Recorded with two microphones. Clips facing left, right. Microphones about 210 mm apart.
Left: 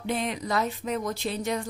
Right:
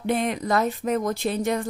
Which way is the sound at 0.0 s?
55° right (ahead or behind).